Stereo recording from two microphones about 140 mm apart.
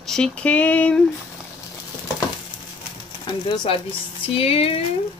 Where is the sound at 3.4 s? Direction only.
35° left (ahead or behind).